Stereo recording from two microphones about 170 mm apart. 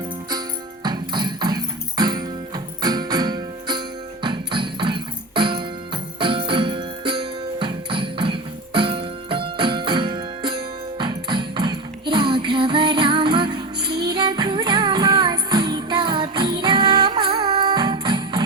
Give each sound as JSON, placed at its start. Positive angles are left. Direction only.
{"t": 0.9, "sound": "music", "side_deg": -25}